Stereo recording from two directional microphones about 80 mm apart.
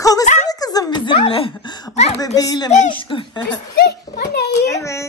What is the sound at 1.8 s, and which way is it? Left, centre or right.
Speech, left.